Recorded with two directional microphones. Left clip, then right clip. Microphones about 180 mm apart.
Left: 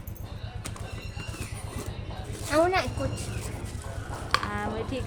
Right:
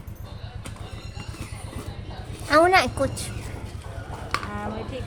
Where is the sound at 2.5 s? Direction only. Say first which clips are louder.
Right 7 dB; 55° right (ahead or behind).